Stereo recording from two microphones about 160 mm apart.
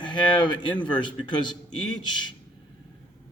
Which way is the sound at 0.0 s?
30° left (ahead or behind).